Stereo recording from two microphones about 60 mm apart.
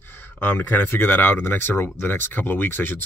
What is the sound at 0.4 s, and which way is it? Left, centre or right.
Speech, left.